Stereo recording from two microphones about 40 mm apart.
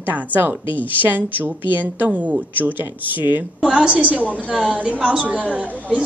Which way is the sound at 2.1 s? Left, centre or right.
Right.